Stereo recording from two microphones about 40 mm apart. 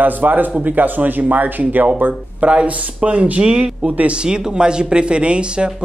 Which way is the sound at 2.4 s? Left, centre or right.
Right.